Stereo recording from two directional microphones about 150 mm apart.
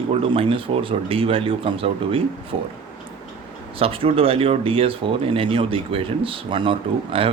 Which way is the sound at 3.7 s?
40° right (ahead or behind).